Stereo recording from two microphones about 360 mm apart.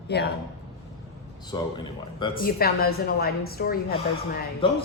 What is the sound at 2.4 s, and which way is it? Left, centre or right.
A woman's voice, left.